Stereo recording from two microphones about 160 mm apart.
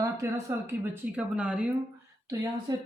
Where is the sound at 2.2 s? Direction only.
25° right (ahead or behind).